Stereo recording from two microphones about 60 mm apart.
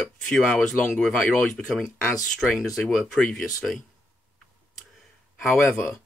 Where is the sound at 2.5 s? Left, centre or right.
Centre.